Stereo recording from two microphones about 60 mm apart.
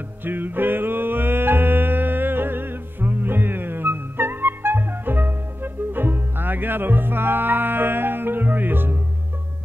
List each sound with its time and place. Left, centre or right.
0.2 s music: right